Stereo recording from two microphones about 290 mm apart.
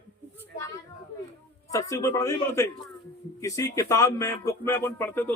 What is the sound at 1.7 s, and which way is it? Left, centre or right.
A man's voice, centre.